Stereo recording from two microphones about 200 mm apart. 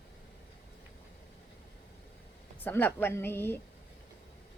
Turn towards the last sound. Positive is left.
turn(degrees=10)  # may be behind; listen again after turning